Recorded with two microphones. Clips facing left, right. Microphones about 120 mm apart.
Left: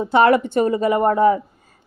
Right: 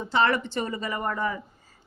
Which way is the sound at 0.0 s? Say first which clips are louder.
Left 9 dB; 55° left (ahead or behind).